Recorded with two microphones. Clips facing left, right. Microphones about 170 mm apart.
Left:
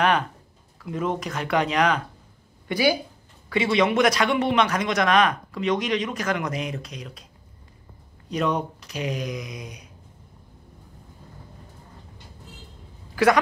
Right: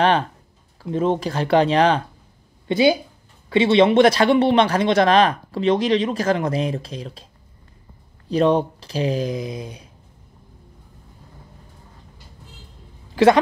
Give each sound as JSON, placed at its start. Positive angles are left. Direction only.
{"t": 0.0, "sound": "a man's voice", "side_deg": -30}
{"t": 8.3, "sound": "a man's voice", "side_deg": -30}
{"t": 13.1, "sound": "speech", "side_deg": -25}